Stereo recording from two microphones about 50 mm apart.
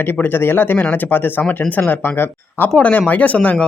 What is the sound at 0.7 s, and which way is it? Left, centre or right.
Speech, left.